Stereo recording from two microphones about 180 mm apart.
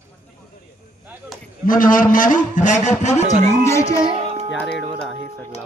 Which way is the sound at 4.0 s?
35° right (ahead or behind).